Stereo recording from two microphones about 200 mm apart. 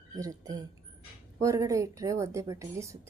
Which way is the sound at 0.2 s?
20° right (ahead or behind).